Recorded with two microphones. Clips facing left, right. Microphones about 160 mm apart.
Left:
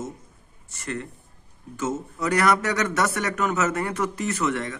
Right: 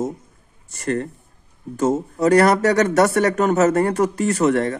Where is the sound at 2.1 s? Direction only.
35° right (ahead or behind).